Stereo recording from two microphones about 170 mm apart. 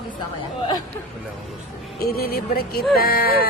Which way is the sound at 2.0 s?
65° left (ahead or behind).